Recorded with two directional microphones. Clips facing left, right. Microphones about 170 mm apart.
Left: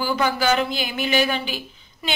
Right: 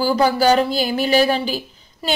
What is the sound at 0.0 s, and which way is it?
Speech, 35° right (ahead or behind).